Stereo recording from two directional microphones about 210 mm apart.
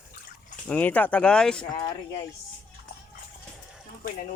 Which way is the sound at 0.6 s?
5° left (ahead or behind).